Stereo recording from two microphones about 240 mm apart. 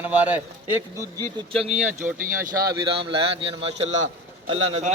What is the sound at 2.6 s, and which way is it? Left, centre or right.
A man's voice, right.